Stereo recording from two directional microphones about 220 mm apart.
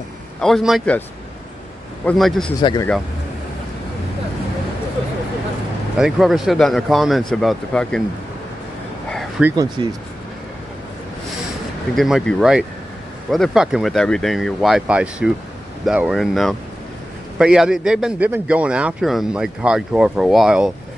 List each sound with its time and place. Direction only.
0.4 s speech: centre (ahead or behind)
2.0 s speech: centre (ahead or behind)
2.6 s speech: 20° left (ahead or behind)
5.9 s speech: centre (ahead or behind)
9.4 s speech: 5° right (ahead or behind)
9.8 s speech: 20° right (ahead or behind)
11.9 s speech: centre (ahead or behind)